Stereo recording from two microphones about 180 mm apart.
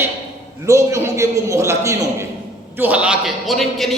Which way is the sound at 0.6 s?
15° right (ahead or behind).